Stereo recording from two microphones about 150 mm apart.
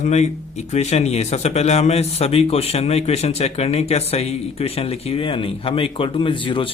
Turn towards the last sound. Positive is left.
turn(degrees=35)  # may be behind; listen again after turning